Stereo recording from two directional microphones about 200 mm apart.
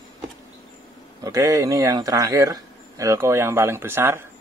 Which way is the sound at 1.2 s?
15° right (ahead or behind).